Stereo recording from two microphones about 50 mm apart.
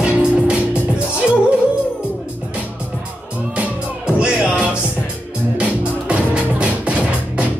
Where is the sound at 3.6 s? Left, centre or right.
Centre.